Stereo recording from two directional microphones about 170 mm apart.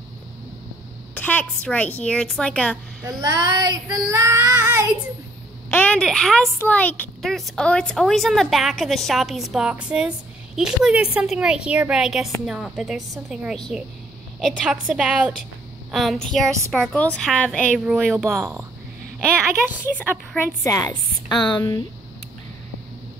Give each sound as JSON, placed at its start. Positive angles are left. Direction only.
{"t": 1.1, "sound": "a woman's voice", "side_deg": 10}
{"t": 3.0, "sound": "child singing", "side_deg": -20}
{"t": 5.7, "sound": "a woman's voice", "side_deg": 10}
{"t": 20.0, "sound": "a woman's voice", "side_deg": 15}